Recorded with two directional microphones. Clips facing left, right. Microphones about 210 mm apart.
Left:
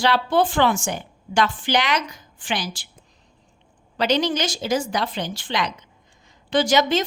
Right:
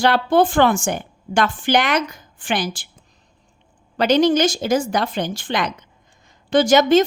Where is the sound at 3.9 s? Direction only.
50° right (ahead or behind).